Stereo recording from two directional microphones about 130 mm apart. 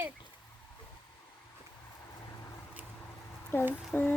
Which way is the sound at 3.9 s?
15° left (ahead or behind).